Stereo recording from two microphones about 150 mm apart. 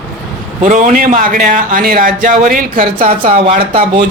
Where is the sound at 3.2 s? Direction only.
45° right (ahead or behind).